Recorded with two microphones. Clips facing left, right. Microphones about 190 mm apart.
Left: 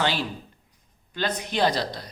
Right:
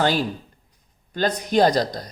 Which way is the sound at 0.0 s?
45° right (ahead or behind).